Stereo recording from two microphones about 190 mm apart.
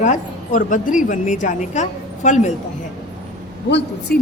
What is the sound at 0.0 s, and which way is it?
A woman's voice, 40° left (ahead or behind).